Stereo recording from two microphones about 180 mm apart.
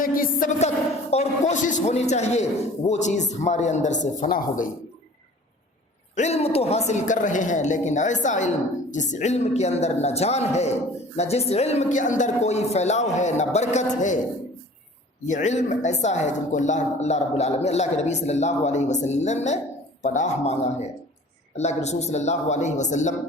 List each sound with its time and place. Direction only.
0.0 s music: 50° left (ahead or behind)
1.1 s speech: 40° left (ahead or behind)
6.1 s speech: 35° left (ahead or behind)
15.3 s speech: 40° left (ahead or behind)